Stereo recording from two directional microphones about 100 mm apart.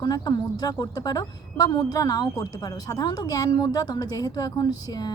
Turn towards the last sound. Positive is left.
turn(degrees=40)  # may be behind; listen again after turning